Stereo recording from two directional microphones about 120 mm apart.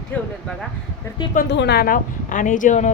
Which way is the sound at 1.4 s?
90° left.